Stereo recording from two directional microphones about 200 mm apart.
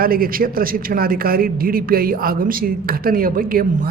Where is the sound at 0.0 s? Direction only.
45° right (ahead or behind).